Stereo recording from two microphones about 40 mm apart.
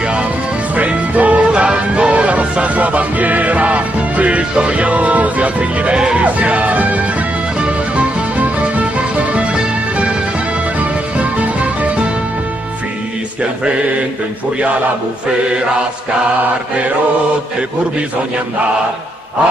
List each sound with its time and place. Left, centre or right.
0.7 s music: right
10.8 s music: right